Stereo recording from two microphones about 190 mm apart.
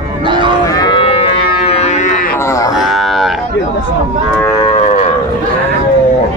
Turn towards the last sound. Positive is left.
turn(degrees=35)  # may be behind; listen again after turning